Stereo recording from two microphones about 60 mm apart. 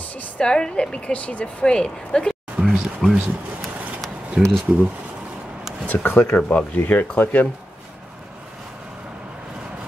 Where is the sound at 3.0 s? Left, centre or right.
Centre.